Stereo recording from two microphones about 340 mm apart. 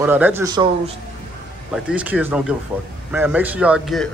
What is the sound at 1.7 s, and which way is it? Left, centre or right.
Speech, centre.